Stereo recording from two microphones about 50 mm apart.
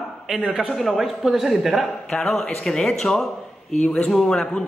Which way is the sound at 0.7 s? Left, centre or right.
Centre.